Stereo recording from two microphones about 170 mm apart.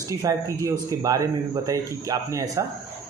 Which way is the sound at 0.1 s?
20° right (ahead or behind).